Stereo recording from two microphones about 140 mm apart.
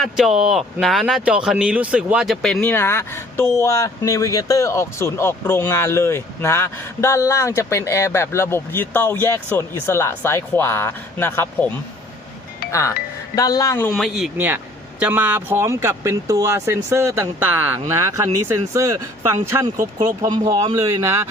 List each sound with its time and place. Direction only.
0.0 s speech: 5° right (ahead or behind); by 11.7 s 15° left (ahead or behind)
13.3 s speech: 25° left (ahead or behind)
13.9 s speech: centre (ahead or behind)
14.3 s speech: 15° right (ahead or behind)
20.0 s speech: 30° right (ahead or behind)